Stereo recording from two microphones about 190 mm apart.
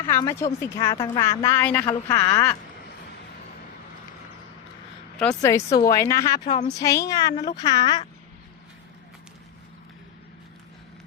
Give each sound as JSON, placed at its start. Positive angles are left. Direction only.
{"t": 0.1, "sound": "a woman's voice", "side_deg": 15}
{"t": 5.1, "sound": "a woman's voice", "side_deg": 5}
{"t": 5.4, "sound": "a woman's voice", "side_deg": 15}